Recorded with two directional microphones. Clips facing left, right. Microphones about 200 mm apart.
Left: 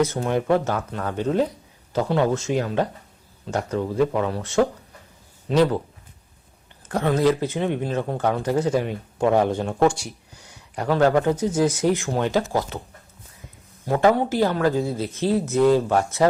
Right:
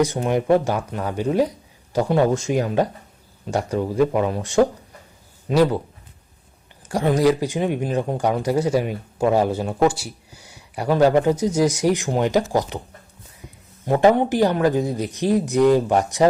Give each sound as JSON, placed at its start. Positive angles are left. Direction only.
{"t": 0.0, "sound": "speech", "side_deg": -15}
{"t": 6.8, "sound": "speech", "side_deg": -15}
{"t": 13.8, "sound": "speech", "side_deg": -20}